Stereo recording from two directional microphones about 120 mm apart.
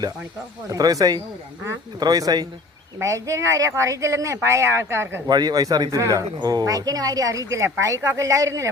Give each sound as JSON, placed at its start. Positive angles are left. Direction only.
{"t": 0.7, "sound": "speech", "side_deg": -30}
{"t": 5.3, "sound": "speech", "side_deg": -35}